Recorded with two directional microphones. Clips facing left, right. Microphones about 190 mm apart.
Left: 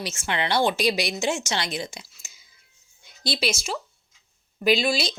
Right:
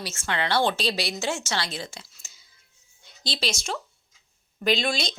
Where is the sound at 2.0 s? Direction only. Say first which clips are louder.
Left 1 dB; 10° left (ahead or behind).